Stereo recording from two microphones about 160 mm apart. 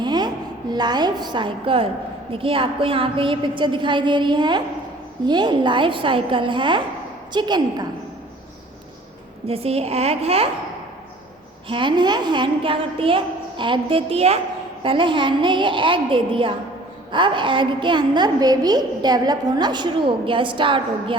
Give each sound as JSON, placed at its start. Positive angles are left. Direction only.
{"t": 0.0, "sound": "a sound", "side_deg": -25}
{"t": 2.3, "sound": "a woman's voice", "side_deg": -35}
{"t": 9.5, "sound": "a woman's voice", "side_deg": -40}
{"t": 11.7, "sound": "a woman's voice", "side_deg": -30}